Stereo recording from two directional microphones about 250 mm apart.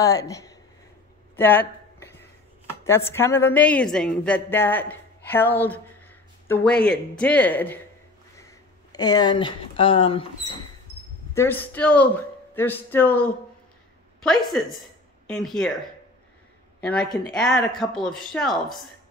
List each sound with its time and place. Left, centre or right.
0.0 s a woman's voice: centre
1.3 s a sound: centre
2.8 s a woman's voice: centre
11.3 s a woman's voice: centre
16.8 s a woman's voice: centre